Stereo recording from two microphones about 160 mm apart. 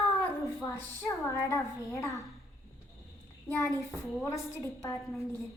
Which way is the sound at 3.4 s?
15° left (ahead or behind).